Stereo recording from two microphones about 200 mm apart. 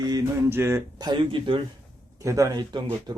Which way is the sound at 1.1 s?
25° right (ahead or behind).